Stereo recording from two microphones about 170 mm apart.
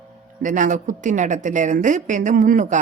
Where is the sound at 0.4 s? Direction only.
50° right (ahead or behind).